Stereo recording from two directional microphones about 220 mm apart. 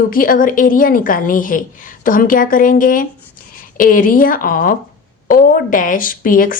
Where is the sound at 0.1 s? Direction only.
40° left (ahead or behind).